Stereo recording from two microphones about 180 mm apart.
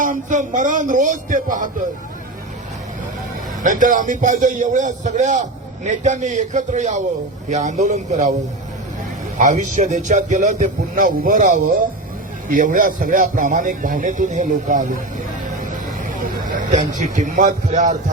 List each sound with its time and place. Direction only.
0.0 s a man's voice: 45° right (ahead or behind)
3.6 s a man's voice: 45° right (ahead or behind)
9.4 s a man's voice: 45° right (ahead or behind)
16.0 s a man's voice: 45° right (ahead or behind)